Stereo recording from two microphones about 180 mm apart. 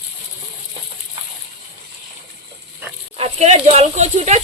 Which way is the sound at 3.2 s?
35° right (ahead or behind).